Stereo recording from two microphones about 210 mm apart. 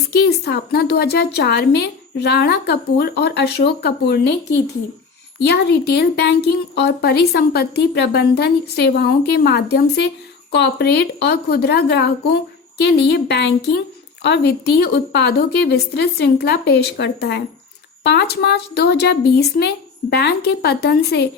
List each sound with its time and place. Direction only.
0.1 s a woman's voice: 50° left (ahead or behind)